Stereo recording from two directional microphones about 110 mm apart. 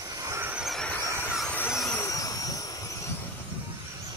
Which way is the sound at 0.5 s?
Centre (ahead or behind).